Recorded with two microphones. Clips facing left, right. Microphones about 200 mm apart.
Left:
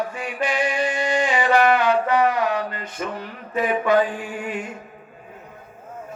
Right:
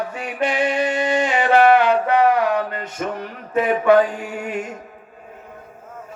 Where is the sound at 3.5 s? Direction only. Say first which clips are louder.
Right 4 dB; 60° right (ahead or behind).